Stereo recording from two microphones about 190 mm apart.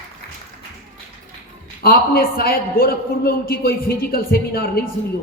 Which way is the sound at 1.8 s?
50° left (ahead or behind).